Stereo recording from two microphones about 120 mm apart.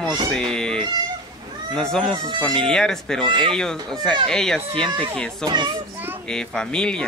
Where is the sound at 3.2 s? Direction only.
45° right (ahead or behind).